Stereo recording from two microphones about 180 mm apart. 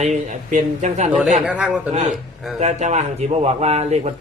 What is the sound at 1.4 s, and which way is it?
Speech, 5° right (ahead or behind).